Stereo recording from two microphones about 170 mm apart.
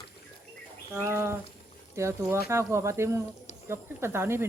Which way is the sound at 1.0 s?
15° right (ahead or behind).